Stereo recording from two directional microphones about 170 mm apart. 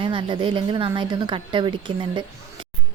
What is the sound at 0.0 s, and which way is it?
A woman's voice, 30° right (ahead or behind).